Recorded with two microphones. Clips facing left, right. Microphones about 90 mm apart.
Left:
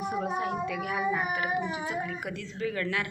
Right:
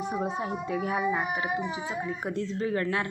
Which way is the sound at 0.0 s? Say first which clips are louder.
Even; 20° right (ahead or behind).